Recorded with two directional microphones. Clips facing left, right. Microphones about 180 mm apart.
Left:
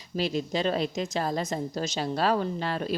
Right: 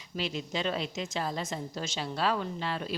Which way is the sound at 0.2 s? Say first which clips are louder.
Left 6 dB; 40° left (ahead or behind).